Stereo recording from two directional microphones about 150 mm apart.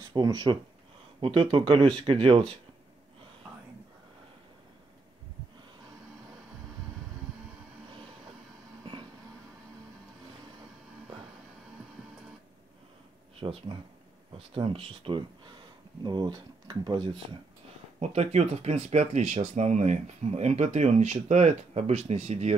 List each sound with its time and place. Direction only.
0.1 s speech: 30° right (ahead or behind)
13.4 s speech: 40° right (ahead or behind)
17.9 s speech: 45° right (ahead or behind)